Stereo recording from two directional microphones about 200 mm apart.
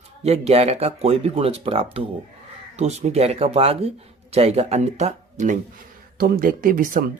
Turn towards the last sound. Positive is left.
turn(degrees=-45)  # may be behind; listen again after turning